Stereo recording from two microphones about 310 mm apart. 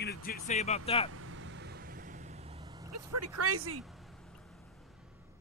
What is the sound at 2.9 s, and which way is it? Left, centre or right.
Speech, right.